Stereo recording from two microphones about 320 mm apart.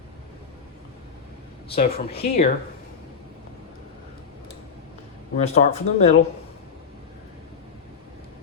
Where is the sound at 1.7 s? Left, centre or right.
Centre.